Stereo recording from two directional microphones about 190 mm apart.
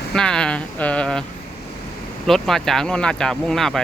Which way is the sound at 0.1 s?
5° left (ahead or behind).